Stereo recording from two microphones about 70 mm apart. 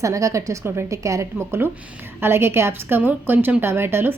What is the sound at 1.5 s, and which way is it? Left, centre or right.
A woman's voice, right.